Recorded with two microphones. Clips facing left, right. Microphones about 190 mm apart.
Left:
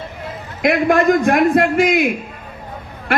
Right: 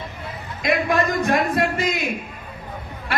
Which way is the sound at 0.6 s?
60° left (ahead or behind).